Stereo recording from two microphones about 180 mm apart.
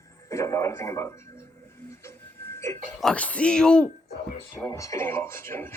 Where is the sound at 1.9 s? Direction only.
15° left (ahead or behind).